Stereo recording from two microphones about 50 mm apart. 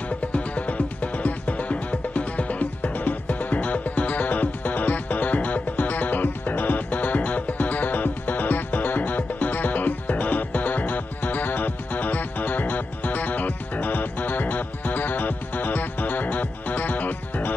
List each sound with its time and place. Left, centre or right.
0.3 s music: left